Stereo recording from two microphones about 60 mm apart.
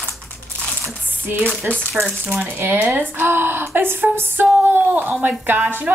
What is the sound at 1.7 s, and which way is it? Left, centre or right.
Speech, right.